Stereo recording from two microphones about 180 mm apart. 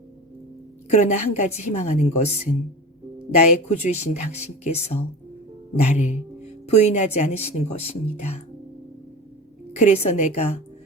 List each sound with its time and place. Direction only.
0.9 s speech: 40° left (ahead or behind)
3.7 s speech: 40° left (ahead or behind)
9.7 s speech: 40° left (ahead or behind)